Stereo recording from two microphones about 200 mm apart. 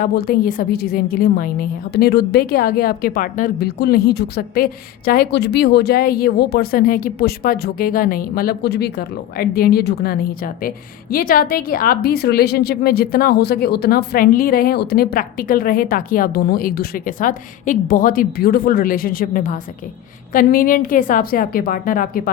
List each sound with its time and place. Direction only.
0.0 s a woman's voice: 45° left (ahead or behind)